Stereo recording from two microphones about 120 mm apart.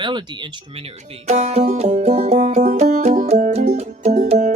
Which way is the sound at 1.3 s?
70° right (ahead or behind).